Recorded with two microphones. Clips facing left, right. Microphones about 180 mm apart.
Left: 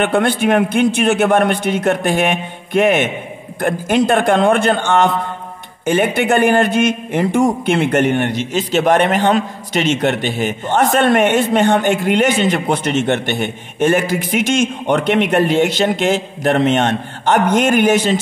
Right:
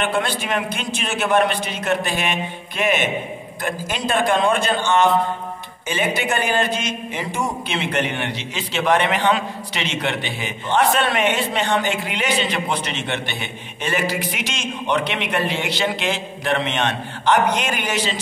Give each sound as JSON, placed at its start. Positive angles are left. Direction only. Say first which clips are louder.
{"t": 0.0, "sound": "a man's voice", "louder": "left 8 dB", "side_deg": 55}